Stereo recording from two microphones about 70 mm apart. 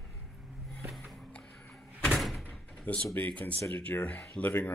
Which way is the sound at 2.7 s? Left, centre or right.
Centre.